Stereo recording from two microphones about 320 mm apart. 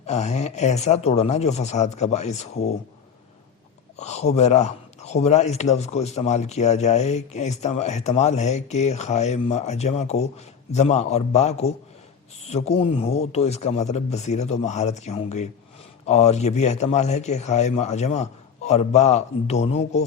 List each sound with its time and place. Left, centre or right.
0.0 s a man's voice: left
3.9 s a man's voice: left